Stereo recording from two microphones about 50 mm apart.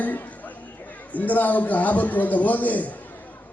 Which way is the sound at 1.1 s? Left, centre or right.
Left.